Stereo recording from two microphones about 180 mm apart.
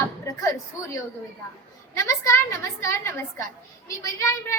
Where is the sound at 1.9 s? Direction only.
15° left (ahead or behind).